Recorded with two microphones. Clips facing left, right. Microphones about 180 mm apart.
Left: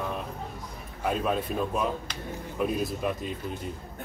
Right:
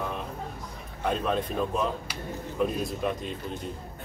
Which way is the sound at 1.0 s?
5° left (ahead or behind).